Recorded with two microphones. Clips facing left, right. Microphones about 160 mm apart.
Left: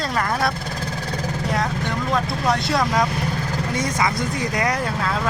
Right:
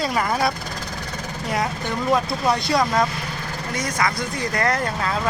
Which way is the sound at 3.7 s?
25° left (ahead or behind).